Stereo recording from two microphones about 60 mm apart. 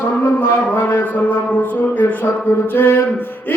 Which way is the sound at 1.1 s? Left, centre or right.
Left.